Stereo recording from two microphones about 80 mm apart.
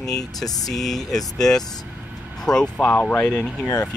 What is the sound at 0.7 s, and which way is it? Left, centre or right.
Speech, centre.